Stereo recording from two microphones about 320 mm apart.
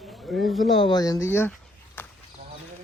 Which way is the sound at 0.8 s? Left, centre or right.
Centre.